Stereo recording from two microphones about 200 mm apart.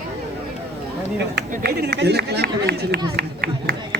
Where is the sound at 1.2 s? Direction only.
55° right (ahead or behind).